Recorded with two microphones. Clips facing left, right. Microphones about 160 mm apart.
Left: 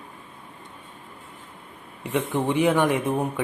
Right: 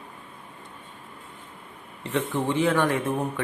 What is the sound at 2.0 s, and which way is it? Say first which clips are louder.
A man's voice: left 2 dB; 15° left (ahead or behind).